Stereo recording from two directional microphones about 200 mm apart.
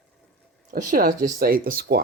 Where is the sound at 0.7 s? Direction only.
40° right (ahead or behind).